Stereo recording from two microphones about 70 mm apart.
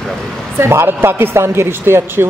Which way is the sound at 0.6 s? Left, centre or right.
Right.